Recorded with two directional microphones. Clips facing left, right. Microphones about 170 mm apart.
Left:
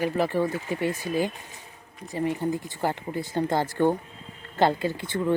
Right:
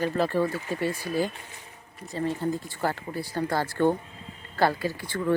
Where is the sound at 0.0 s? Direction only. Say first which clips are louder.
Even; 15° left (ahead or behind).